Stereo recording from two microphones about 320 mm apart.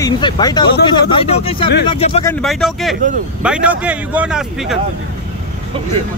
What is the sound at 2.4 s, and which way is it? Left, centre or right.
Speech, centre.